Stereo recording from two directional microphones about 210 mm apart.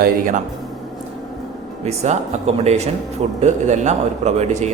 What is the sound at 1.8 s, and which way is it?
A man's voice, 30° right (ahead or behind).